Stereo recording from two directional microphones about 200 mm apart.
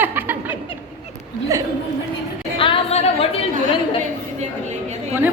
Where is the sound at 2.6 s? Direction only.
25° left (ahead or behind).